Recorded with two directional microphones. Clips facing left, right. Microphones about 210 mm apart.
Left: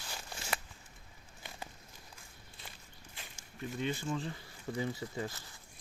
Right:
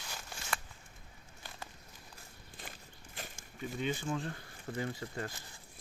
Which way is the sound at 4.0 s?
Centre (ahead or behind).